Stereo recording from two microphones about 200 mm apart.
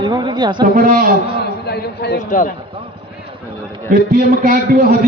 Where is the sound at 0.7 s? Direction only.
45° right (ahead or behind).